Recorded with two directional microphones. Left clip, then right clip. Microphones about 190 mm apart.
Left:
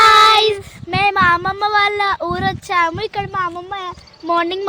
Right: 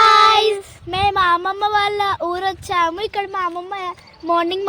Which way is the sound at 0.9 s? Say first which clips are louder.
Left 2 dB; 10° left (ahead or behind).